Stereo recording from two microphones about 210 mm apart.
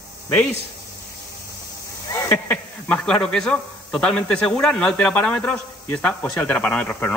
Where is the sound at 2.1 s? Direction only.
10° left (ahead or behind).